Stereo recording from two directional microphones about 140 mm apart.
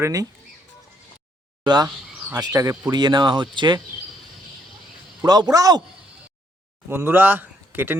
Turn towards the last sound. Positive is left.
turn(degrees=-15)  # may be behind; listen again after turning